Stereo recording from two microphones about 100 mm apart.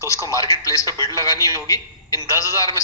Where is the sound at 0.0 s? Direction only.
35° left (ahead or behind).